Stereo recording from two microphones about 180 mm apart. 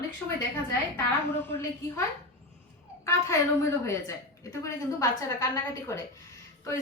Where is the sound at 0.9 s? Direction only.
15° left (ahead or behind).